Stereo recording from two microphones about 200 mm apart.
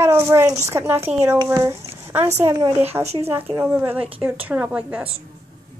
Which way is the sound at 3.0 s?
30° right (ahead or behind).